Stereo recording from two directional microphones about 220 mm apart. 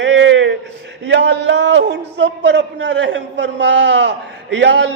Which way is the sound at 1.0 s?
55° right (ahead or behind).